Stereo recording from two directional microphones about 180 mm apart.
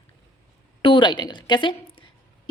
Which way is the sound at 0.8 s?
25° left (ahead or behind).